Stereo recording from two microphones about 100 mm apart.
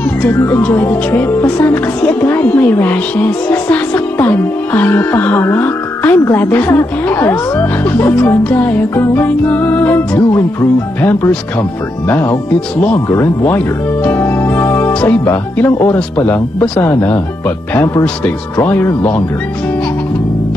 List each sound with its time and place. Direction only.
0.2 s speech: 20° left (ahead or behind)
14.0 s music: 20° left (ahead or behind)
15.5 s speech: 20° left (ahead or behind)
18.6 s speech: 25° left (ahead or behind)